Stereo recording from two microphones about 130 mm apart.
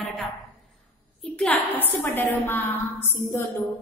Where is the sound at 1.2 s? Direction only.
10° left (ahead or behind).